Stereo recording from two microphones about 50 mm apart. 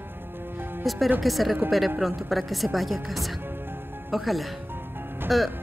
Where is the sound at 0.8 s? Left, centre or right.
Centre.